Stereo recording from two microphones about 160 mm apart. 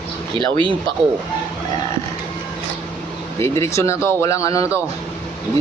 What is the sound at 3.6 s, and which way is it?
Speech, 15° left (ahead or behind).